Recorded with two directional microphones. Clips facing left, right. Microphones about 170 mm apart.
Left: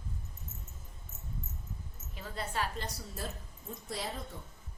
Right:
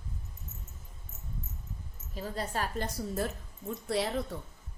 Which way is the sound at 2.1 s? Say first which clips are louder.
Right 4 dB; 40° right (ahead or behind).